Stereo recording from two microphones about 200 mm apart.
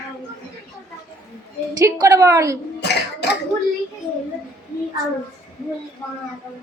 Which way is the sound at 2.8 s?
55° left (ahead or behind).